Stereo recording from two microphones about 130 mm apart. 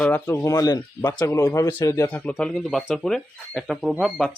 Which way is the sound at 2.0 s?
15° left (ahead or behind).